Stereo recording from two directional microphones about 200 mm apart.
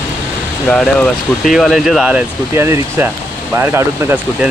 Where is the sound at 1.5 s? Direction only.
Centre (ahead or behind).